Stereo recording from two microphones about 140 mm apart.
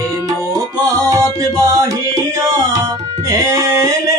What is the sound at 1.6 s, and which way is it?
Music, 20° right (ahead or behind).